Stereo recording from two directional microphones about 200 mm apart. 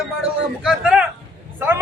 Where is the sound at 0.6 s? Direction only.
5° right (ahead or behind).